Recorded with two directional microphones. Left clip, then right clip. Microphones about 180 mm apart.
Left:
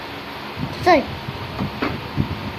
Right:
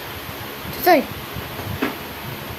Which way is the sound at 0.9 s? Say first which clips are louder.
Even; 25° right (ahead or behind).